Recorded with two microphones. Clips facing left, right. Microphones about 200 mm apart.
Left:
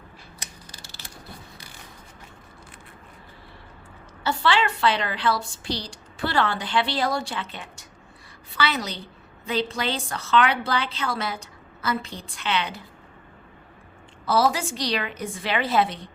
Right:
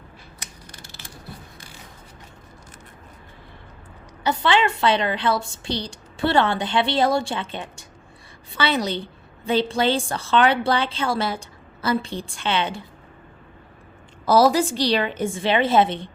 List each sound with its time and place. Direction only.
4.2 s a woman's voice: 20° right (ahead or behind)
14.3 s a woman's voice: 40° right (ahead or behind)